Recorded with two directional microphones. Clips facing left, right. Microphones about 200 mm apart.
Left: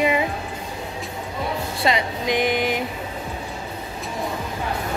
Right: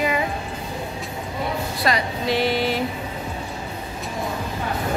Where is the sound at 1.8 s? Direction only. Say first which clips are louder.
Left 1 dB; 20° left (ahead or behind).